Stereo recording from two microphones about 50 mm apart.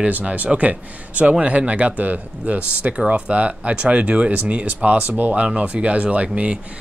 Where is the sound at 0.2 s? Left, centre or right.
Right.